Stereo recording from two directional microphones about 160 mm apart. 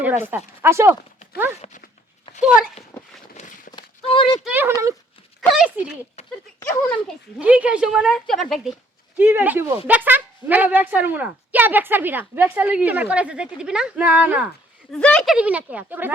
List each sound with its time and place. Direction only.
0.0 s speech: 10° right (ahead or behind)
1.6 s speech: 40° left (ahead or behind)
2.4 s a woman's voice: 5° right (ahead or behind)
3.4 s walk: 45° left (ahead or behind)
3.7 s horse: 30° left (ahead or behind)
4.4 s speech: 10° right (ahead or behind)
6.2 s a sound: 40° left (ahead or behind)
7.3 s a woman's voice: 10° right (ahead or behind)
9.1 s speech: 10° right (ahead or behind)
14.9 s speech: 5° left (ahead or behind); by 16.1 s 10° right (ahead or behind)